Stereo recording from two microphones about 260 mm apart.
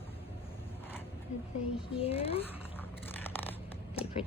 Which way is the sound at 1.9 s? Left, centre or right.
Left.